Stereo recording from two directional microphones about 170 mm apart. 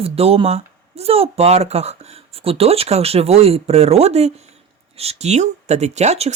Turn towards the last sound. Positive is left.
turn(degrees=-40)  # may be behind; listen again after turning